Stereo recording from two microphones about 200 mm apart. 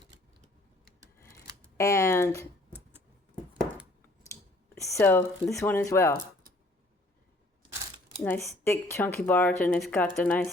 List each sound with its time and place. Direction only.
1.8 s speech: 15° left (ahead or behind)
4.7 s speech: 15° left (ahead or behind)
7.6 s a sound: 25° right (ahead or behind)
8.2 s speech: 10° left (ahead or behind)